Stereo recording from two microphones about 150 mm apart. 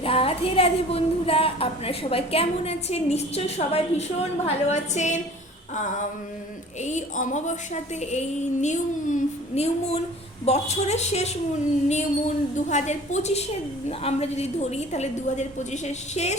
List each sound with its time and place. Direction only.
0.0 s a woman's voice: 40° left (ahead or behind)
5.7 s a sound: 55° left (ahead or behind)
6.8 s a woman's voice: 55° left (ahead or behind)